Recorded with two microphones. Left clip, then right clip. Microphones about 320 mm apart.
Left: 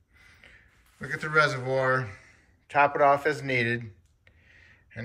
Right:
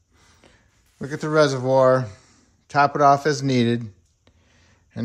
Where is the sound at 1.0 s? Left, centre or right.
Centre.